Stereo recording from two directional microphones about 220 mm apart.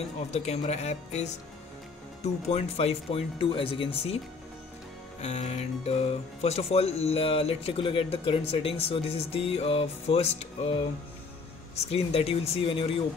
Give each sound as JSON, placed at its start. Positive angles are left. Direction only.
{"t": 0.3, "sound": "a woman's voice", "side_deg": 30}
{"t": 5.2, "sound": "speech", "side_deg": 30}
{"t": 11.9, "sound": "speech", "side_deg": 25}